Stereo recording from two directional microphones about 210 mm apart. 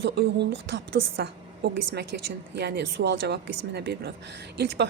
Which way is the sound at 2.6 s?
50° right (ahead or behind).